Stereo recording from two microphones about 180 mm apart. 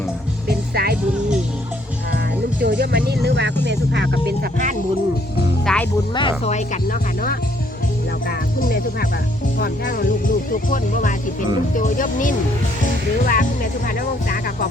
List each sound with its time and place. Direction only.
0.4 s music: 60° right (ahead or behind)
2.1 s music: 65° right (ahead or behind)
4.5 s music: 45° right (ahead or behind)
5.6 s music: 5° left (ahead or behind)
6.1 s speech: 30° left (ahead or behind); by 14.7 s 50° left (ahead or behind)